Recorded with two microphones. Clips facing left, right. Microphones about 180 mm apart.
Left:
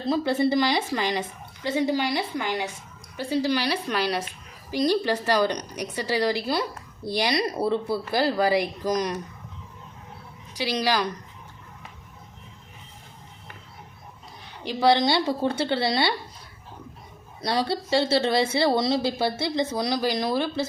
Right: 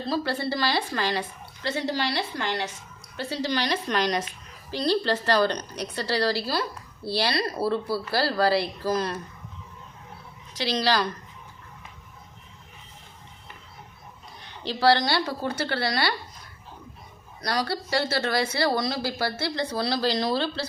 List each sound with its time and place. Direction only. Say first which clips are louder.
0.0 s a woman's voice: left 5 dB; 20° left (ahead or behind)
10.5 s a woman's voice: even; 10° left (ahead or behind)
14.4 s a woman's voice: left 1 dB; 15° left (ahead or behind)
17.4 s speech: left 2 dB; 25° left (ahead or behind)